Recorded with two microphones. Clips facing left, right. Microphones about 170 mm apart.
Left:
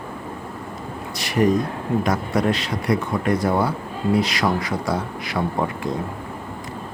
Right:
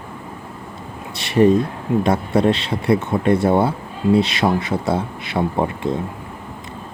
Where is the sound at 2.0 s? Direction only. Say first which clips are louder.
Right 5 dB; 25° right (ahead or behind).